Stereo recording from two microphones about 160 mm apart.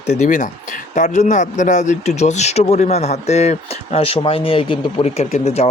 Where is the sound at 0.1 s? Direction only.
50° left (ahead or behind).